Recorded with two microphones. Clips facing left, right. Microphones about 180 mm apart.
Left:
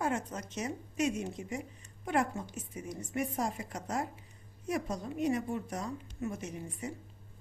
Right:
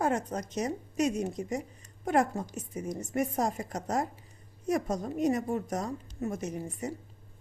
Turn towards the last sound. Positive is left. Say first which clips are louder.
# right 5 dB
turn(degrees=-40)  # may be behind; listen again after turning